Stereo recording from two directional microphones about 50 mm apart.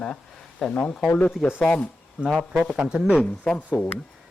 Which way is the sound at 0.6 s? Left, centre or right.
Left.